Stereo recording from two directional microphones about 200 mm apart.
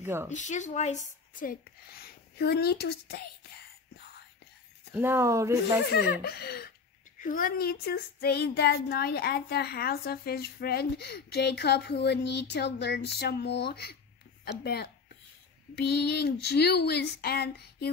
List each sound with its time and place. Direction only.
0.0 s a woman's voice: 10° right (ahead or behind)
0.3 s speech: 35° left (ahead or behind)
4.9 s speech: 10° right (ahead or behind)
5.9 s speech: 50° left (ahead or behind)